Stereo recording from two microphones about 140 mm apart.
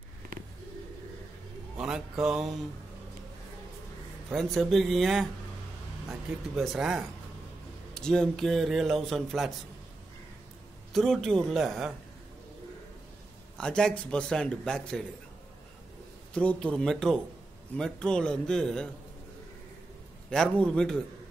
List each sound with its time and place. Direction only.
1.8 s a man's voice: 5° right (ahead or behind)
4.3 s a man's voice: centre (ahead or behind)
6.5 s a man's voice: centre (ahead or behind)
10.9 s a man's voice: centre (ahead or behind)
13.6 s a man's voice: 5° left (ahead or behind)
16.3 s a man's voice: 5° left (ahead or behind)
20.2 s a man's voice: 5° left (ahead or behind)